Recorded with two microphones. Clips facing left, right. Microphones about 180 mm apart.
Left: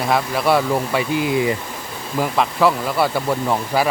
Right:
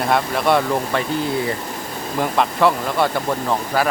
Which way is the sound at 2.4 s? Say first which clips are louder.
Even; centre (ahead or behind).